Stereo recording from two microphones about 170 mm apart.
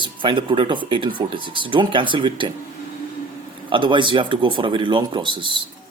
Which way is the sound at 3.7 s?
30° right (ahead or behind).